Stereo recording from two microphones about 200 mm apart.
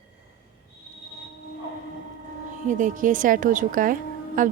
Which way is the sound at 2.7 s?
40° right (ahead or behind).